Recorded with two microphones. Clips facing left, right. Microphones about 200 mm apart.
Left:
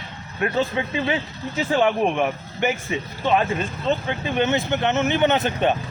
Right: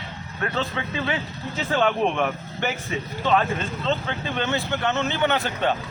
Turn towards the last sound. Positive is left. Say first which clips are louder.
# left 3 dB
turn(degrees=20)  # may be behind; listen again after turning